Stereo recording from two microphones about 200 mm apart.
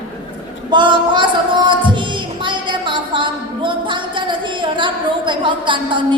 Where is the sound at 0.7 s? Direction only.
25° right (ahead or behind).